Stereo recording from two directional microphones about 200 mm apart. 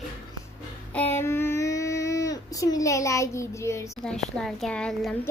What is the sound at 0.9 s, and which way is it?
Child singing, 10° left (ahead or behind).